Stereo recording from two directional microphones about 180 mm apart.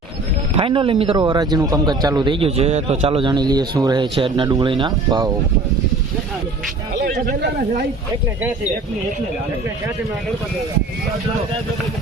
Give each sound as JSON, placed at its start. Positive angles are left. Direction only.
{"t": 0.5, "sound": "speech", "side_deg": -30}
{"t": 6.9, "sound": "a man's voice", "side_deg": -50}